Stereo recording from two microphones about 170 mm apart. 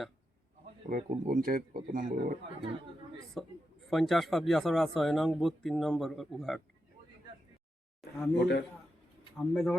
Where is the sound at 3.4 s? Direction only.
Centre (ahead or behind).